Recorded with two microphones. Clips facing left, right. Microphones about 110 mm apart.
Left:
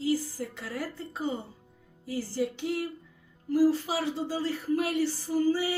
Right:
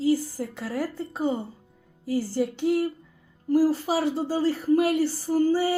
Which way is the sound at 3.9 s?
40° right (ahead or behind).